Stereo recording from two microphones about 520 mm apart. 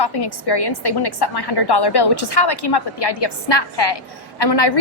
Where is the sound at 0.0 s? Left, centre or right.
Left.